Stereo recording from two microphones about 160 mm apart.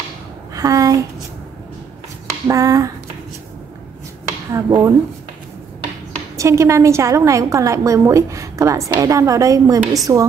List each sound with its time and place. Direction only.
0.6 s a sound: 20° right (ahead or behind)
2.4 s a woman's voice: 20° right (ahead or behind)
4.5 s a woman's voice: 20° right (ahead or behind)
6.3 s a woman's voice: 20° right (ahead or behind)